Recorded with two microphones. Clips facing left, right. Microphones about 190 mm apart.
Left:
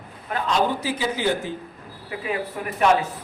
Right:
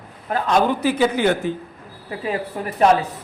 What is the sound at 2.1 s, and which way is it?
Speech, 35° right (ahead or behind).